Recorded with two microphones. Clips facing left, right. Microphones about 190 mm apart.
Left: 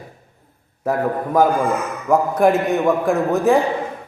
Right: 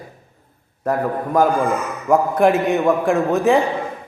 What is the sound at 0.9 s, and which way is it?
A man's voice, centre (ahead or behind).